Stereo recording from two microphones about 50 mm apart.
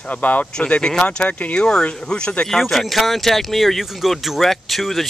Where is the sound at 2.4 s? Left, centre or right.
Centre.